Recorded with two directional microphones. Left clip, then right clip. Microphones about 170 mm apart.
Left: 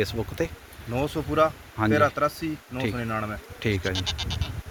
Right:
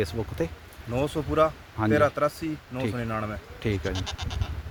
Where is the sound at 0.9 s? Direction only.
10° right (ahead or behind).